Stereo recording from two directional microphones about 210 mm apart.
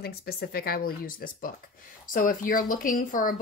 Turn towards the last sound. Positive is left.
turn(degrees=40)  # may be behind; listen again after turning